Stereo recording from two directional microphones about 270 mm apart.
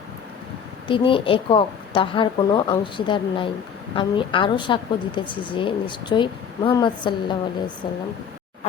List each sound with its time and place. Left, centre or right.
0.9 s a woman's voice: centre